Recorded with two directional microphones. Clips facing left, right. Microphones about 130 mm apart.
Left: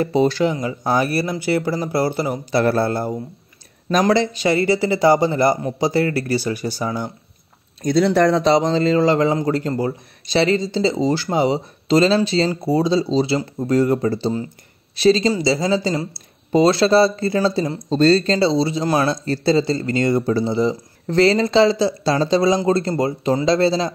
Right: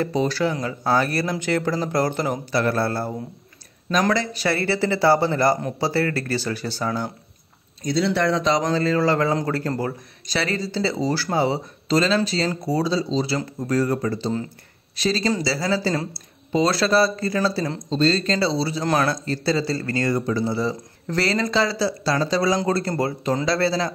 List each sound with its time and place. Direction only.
0.4 s a man's voice: 15° left (ahead or behind)
2.6 s speech: 30° left (ahead or behind)
2.9 s a man's voice: 20° left (ahead or behind)
7.8 s a man's voice: 50° left (ahead or behind); by 17.7 s 20° left (ahead or behind)
17.8 s speech: 50° left (ahead or behind)
18.1 s a man's voice: 30° left (ahead or behind)